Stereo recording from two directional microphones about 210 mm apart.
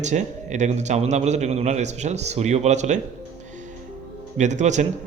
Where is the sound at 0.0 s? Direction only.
35° right (ahead or behind).